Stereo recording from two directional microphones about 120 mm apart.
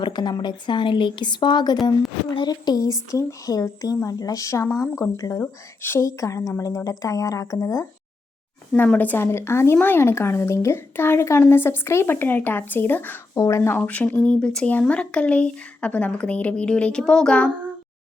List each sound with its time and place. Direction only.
0.0 s a woman's voice: 35° left (ahead or behind)
5.4 s a woman's voice: 20° left (ahead or behind)
8.7 s a woman's voice: 15° left (ahead or behind)